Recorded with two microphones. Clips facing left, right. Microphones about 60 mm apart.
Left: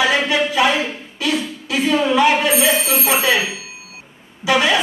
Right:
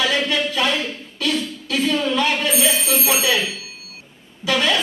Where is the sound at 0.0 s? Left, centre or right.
Centre.